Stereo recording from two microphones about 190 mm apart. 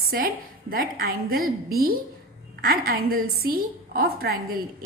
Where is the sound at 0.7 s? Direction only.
50° right (ahead or behind).